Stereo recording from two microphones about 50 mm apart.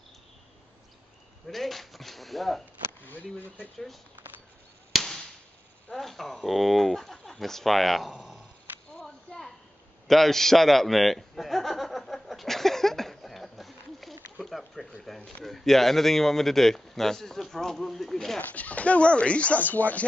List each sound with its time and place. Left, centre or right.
1.5 s speech: centre
3.0 s speech: left
4.9 s a sound: centre
5.9 s speech: centre
8.9 s a sound: centre
10.0 s chuckle: centre
14.4 s a sound: centre
15.0 s speech: centre
18.5 s speech: left